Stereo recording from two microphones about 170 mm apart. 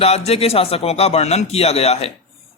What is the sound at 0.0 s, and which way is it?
A man's voice, 35° left (ahead or behind).